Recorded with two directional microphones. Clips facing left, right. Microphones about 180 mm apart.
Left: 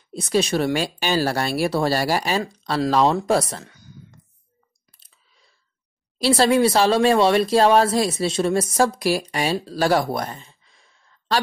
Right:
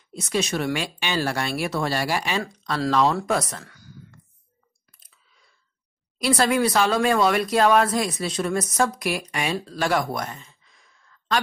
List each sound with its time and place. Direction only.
0.1 s speech: 35° left (ahead or behind)
2.4 s speech: 25° left (ahead or behind)
3.3 s a sound: 30° left (ahead or behind)
6.1 s speech: 30° left (ahead or behind)